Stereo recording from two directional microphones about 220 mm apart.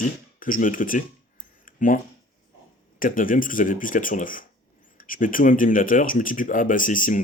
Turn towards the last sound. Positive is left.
turn(degrees=35)  # may be behind; listen again after turning